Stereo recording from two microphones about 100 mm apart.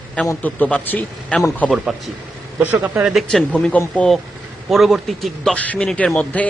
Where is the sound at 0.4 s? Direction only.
15° left (ahead or behind).